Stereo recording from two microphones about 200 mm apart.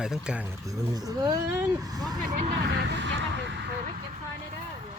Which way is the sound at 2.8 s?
60° right (ahead or behind).